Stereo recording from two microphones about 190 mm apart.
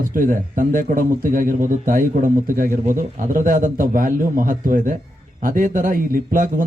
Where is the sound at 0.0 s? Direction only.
45° right (ahead or behind).